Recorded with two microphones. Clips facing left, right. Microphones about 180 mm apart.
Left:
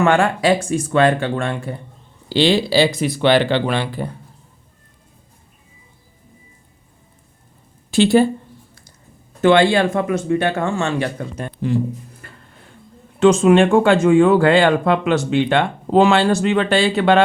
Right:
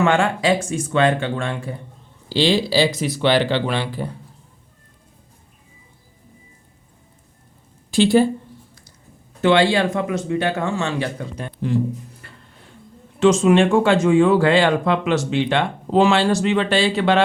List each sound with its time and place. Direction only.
0.0 s speech: 55° left (ahead or behind)
7.9 s a woman's voice: 65° left (ahead or behind)
9.4 s speech: 50° left (ahead or behind)
12.2 s music: 50° left (ahead or behind)
13.1 s speech: 55° left (ahead or behind)